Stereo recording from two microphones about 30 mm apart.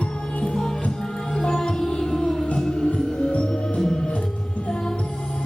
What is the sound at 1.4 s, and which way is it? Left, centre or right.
Music, left.